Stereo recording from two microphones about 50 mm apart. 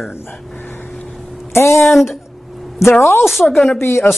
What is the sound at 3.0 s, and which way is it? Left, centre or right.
A woman's voice, left.